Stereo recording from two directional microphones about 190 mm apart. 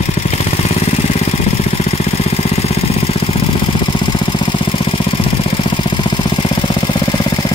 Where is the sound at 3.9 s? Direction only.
25° left (ahead or behind).